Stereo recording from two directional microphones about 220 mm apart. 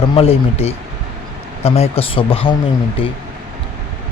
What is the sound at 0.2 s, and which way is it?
A man's voice, 25° left (ahead or behind).